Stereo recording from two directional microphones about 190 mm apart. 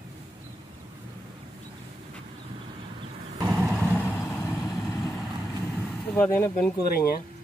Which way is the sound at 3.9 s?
15° left (ahead or behind).